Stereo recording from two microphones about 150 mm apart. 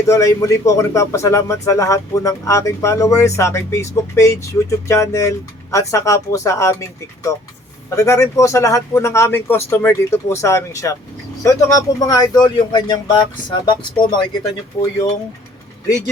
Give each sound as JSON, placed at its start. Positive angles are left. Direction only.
{"t": 0.1, "sound": "speech", "side_deg": 20}
{"t": 7.9, "sound": "speech", "side_deg": 20}